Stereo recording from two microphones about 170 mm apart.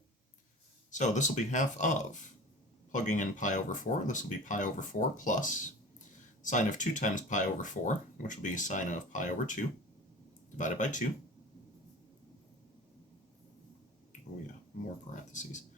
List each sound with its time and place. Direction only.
0.9 s speech: 45° left (ahead or behind)
15.1 s speech: 45° left (ahead or behind)